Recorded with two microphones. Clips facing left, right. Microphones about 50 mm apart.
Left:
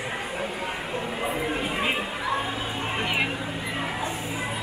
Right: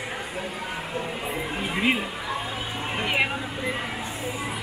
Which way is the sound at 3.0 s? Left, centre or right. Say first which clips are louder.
Right 3 dB; centre.